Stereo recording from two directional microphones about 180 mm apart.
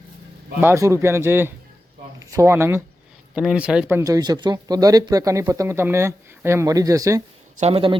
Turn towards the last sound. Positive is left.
turn(degrees=-30)  # may be behind; listen again after turning